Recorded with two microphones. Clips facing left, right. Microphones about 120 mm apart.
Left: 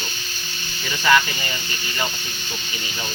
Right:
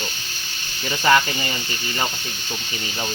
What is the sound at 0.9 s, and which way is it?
Speech, 30° right (ahead or behind).